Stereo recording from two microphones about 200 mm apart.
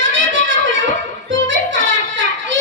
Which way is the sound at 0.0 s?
70° right (ahead or behind).